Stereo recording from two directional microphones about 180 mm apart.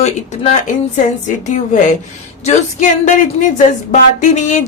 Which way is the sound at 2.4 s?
40° left (ahead or behind).